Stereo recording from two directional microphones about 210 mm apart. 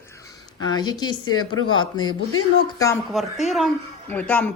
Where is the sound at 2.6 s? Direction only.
15° left (ahead or behind).